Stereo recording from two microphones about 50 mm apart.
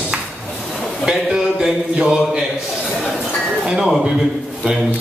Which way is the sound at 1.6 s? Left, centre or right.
Centre.